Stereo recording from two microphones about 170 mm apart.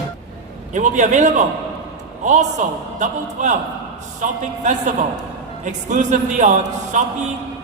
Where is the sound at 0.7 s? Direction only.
45° right (ahead or behind).